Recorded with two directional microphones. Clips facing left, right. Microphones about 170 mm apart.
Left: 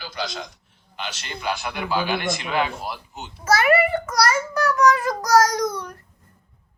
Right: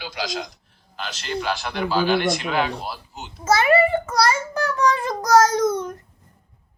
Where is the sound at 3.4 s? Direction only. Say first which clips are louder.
Right 1 dB; 25° right (ahead or behind).